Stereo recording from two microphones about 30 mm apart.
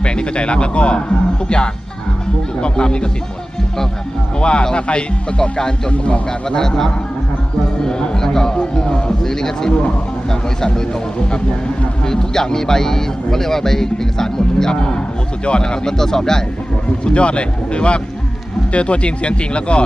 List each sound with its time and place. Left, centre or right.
0.0 s speech: left
4.4 s speech: left
5.9 s a man's voice: left
6.5 s speech: centre
7.9 s a sound: centre
9.2 s a man's voice: centre
12.0 s a man's voice: centre
14.7 s speech: left
15.9 s a man's voice: centre
17.0 s speech: left